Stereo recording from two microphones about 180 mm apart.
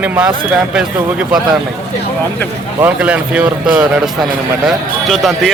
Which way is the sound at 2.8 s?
5° right (ahead or behind).